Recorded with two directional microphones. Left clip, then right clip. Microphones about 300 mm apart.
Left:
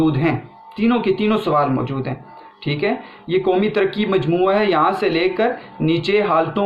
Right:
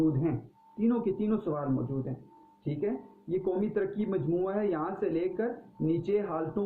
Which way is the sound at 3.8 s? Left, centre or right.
Centre.